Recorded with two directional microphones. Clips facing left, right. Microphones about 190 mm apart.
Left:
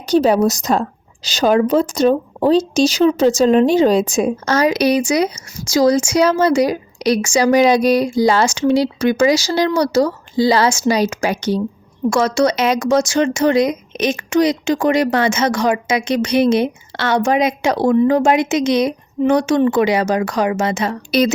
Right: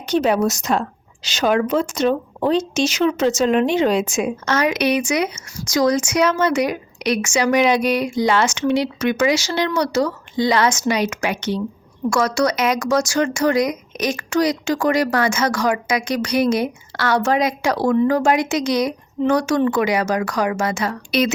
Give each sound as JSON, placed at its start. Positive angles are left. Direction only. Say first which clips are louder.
{"t": 0.0, "sound": "a woman's voice", "louder": "left 4 dB", "side_deg": 35}
{"t": 12.1, "sound": "speech", "louder": "left 3 dB", "side_deg": 25}
{"t": 21.1, "sound": "a woman's voice", "louder": "left 4 dB", "side_deg": 35}